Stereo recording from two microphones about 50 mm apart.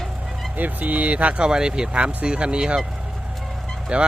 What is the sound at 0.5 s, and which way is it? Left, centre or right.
Speech, right.